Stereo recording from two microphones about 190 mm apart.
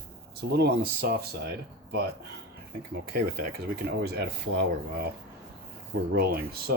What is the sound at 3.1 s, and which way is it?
Speech, 55° right (ahead or behind).